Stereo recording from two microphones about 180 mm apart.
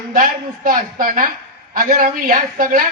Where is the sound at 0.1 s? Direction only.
45° right (ahead or behind).